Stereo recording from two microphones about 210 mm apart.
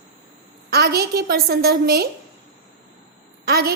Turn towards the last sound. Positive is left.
turn(degrees=-50)  # may be behind; listen again after turning